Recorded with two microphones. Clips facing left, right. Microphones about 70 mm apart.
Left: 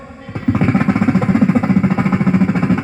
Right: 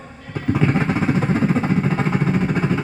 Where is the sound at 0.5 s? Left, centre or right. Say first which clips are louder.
Left 4 dB; left.